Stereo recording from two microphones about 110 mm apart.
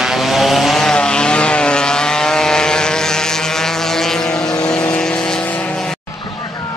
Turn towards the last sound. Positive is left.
turn(degrees=5)  # may be behind; listen again after turning